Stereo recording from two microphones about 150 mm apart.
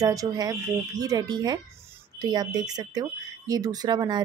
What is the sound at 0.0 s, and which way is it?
Speech, 25° right (ahead or behind).